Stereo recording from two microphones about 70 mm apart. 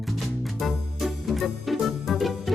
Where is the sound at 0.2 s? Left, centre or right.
Centre.